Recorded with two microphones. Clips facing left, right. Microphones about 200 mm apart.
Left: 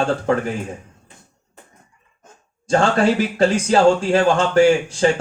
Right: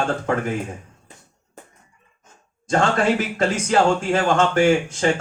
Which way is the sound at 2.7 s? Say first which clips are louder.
Left 3 dB; 35° left (ahead or behind).